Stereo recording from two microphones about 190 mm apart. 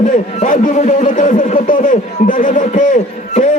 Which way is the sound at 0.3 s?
45° left (ahead or behind).